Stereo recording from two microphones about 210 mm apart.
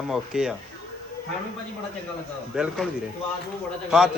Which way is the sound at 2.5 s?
Centre (ahead or behind).